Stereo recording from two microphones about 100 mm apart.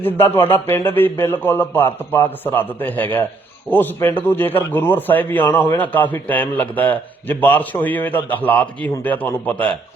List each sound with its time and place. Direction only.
0.0 s a man's voice: 20° left (ahead or behind)